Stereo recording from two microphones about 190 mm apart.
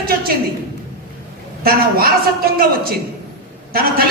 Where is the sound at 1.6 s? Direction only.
50° right (ahead or behind).